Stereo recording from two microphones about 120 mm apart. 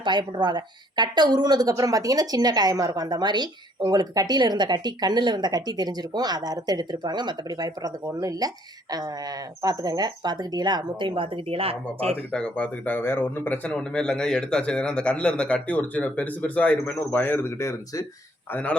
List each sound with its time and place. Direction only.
0.0 s a woman's voice: 40° right (ahead or behind)
9.6 s a woman's voice: 30° right (ahead or behind); by 12.1 s 55° right (ahead or behind)
12.3 s speech: 10° left (ahead or behind); by 18.0 s 25° left (ahead or behind)
18.5 s speech: 10° left (ahead or behind)